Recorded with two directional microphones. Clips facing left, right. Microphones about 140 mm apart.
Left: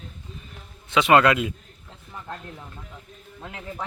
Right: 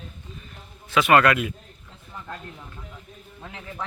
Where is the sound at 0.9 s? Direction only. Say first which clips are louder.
Left 1 dB; 20° left (ahead or behind).